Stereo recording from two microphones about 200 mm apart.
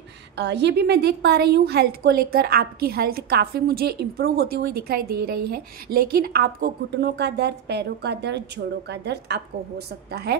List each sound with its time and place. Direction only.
0.4 s a woman's voice: 60° right (ahead or behind)